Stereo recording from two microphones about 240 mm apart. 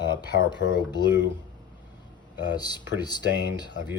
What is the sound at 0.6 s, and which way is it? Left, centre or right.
Speech, left.